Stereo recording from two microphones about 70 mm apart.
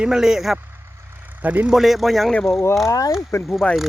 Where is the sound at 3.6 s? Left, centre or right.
Centre.